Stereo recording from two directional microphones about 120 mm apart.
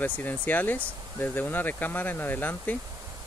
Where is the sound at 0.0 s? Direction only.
15° left (ahead or behind).